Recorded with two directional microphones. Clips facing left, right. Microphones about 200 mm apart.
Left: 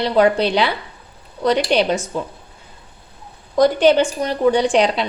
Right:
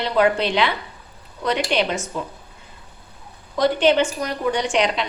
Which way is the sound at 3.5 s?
40° left (ahead or behind).